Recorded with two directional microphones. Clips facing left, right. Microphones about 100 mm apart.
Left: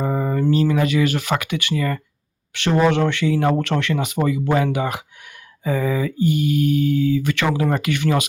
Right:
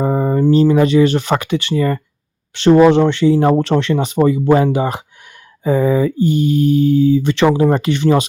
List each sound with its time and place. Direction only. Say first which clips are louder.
0.0 s speech: right 6 dB; 25° right (ahead or behind)